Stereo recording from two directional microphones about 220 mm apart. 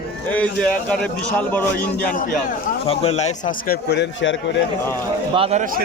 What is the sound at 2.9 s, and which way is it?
A man's voice, 30° left (ahead or behind).